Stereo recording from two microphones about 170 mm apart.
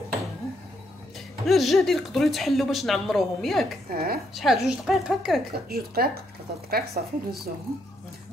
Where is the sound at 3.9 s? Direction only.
65° right (ahead or behind).